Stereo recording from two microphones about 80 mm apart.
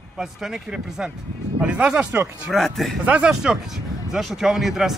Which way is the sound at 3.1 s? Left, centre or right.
Centre.